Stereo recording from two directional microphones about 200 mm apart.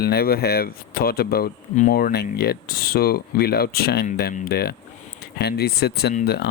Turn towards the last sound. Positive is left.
turn(degrees=55)  # may be behind; listen again after turning